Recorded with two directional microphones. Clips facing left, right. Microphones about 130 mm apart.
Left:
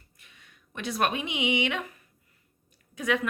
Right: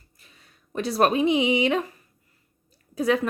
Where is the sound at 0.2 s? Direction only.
35° right (ahead or behind).